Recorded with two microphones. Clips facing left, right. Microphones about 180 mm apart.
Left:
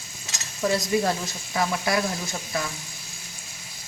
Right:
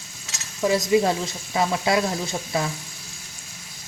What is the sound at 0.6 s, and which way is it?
Sizzle, 20° right (ahead or behind).